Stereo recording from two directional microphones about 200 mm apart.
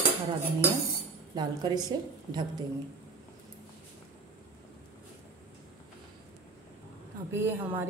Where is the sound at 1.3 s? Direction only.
20° right (ahead or behind).